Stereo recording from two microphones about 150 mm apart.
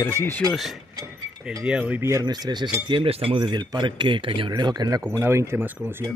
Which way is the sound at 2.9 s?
35° right (ahead or behind).